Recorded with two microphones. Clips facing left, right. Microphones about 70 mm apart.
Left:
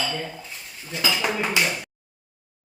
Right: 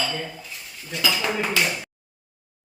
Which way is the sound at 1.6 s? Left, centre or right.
Centre.